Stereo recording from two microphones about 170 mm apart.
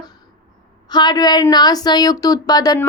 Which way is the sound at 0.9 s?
25° left (ahead or behind).